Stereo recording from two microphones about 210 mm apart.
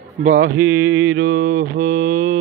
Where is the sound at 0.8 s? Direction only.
85° right.